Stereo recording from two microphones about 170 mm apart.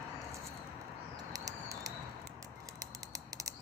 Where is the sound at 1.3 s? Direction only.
20° right (ahead or behind).